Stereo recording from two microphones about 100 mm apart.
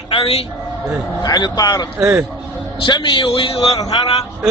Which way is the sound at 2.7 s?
55° left (ahead or behind).